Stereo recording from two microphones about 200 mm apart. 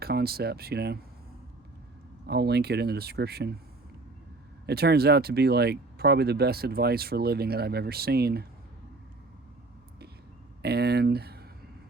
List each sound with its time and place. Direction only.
0.0 s speech: 50° right (ahead or behind)
2.2 s speech: 55° right (ahead or behind)
4.6 s speech: 55° right (ahead or behind)
10.6 s speech: 55° right (ahead or behind)